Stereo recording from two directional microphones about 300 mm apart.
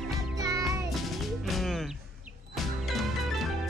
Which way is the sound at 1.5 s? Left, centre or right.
Centre.